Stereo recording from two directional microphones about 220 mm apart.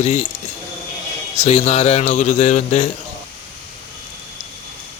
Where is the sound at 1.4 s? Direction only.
30° left (ahead or behind).